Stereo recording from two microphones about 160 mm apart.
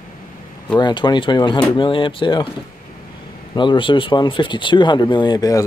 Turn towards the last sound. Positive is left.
turn(degrees=25)  # may be behind; listen again after turning